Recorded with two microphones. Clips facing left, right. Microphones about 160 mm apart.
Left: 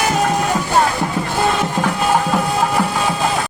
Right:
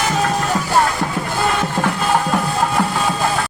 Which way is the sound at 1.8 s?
5° left (ahead or behind).